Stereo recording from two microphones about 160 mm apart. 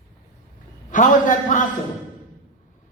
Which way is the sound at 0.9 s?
55° left (ahead or behind).